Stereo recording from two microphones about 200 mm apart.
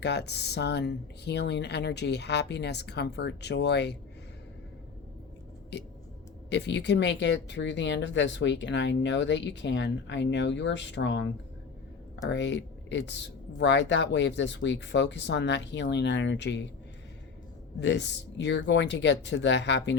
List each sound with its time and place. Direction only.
0.0 s speech: 55° left (ahead or behind)
5.7 s speech: 60° left (ahead or behind)
12.3 s speech: 60° left (ahead or behind)
17.7 s speech: 60° left (ahead or behind)